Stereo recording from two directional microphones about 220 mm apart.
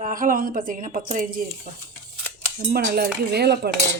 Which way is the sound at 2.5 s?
45° right (ahead or behind).